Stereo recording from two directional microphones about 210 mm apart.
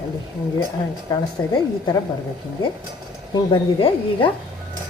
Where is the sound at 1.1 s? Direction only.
20° left (ahead or behind).